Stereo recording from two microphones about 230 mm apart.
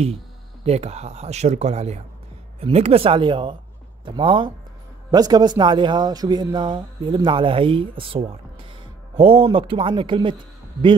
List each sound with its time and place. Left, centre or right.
0.7 s a man's voice: right